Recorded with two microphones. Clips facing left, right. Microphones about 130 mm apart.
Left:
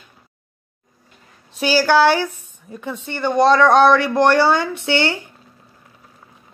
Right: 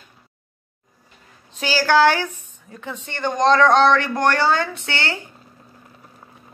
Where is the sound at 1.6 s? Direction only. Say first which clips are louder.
Left 2 dB; 15° left (ahead or behind).